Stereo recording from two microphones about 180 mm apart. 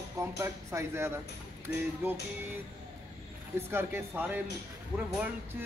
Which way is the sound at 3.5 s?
10° right (ahead or behind).